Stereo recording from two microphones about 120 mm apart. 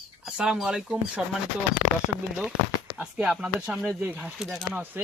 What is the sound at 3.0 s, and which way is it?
Speech, 10° right (ahead or behind).